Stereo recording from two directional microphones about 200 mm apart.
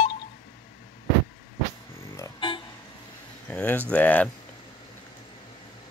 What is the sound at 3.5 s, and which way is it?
Speech, 10° left (ahead or behind).